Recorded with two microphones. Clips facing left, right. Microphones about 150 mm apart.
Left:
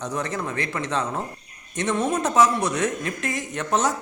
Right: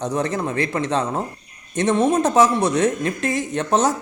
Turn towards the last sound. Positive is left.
turn(degrees=-30)  # may be behind; listen again after turning